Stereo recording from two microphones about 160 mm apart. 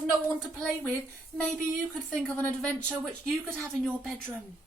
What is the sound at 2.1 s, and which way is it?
Speech, 10° left (ahead or behind).